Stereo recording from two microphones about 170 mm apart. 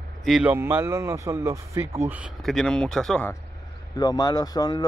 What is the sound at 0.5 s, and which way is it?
Speech, 15° right (ahead or behind).